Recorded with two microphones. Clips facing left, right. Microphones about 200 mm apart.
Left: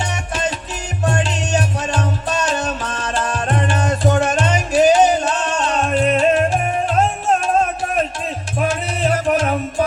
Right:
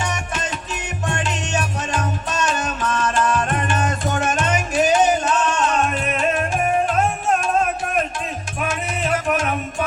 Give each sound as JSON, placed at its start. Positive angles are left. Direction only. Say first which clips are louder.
{"t": 0.0, "sound": "music", "louder": "left 3 dB", "side_deg": 30}
{"t": 8.6, "sound": "music", "louder": "left 5 dB", "side_deg": 35}